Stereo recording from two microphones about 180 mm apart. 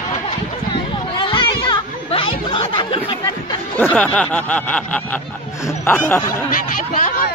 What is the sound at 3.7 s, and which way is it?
Speech, 10° left (ahead or behind).